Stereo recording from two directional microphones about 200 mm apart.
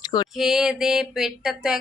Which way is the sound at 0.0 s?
20° left (ahead or behind).